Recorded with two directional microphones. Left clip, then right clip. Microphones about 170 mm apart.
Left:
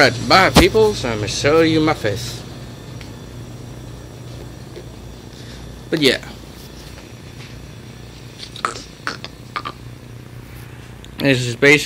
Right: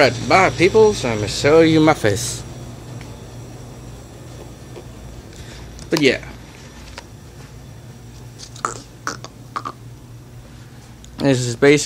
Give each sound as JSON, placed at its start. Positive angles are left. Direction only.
{"t": 0.0, "sound": "speech", "side_deg": -5}
{"t": 6.0, "sound": "speech", "side_deg": 0}
{"t": 8.4, "sound": "chewing", "side_deg": -5}
{"t": 11.1, "sound": "speech", "side_deg": -15}